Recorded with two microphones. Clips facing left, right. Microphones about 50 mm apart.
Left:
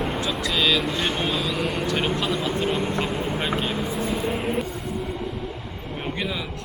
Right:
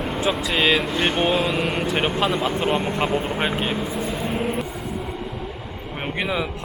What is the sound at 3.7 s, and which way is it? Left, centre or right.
Speech, centre.